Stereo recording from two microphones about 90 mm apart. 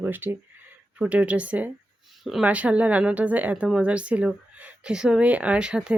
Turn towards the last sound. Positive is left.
turn(degrees=-10)  # may be behind; listen again after turning